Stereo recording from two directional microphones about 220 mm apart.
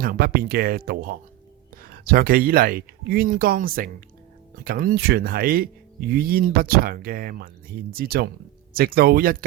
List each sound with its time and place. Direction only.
0.0 s speech: 40° right (ahead or behind)